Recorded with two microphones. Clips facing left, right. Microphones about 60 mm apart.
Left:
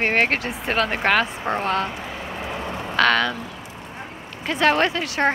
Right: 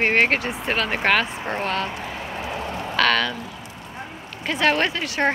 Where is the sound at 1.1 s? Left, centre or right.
Left.